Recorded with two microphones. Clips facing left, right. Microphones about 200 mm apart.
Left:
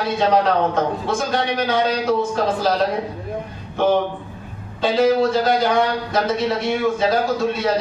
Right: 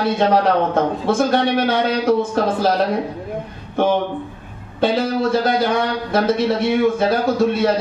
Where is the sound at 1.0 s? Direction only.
55° right (ahead or behind).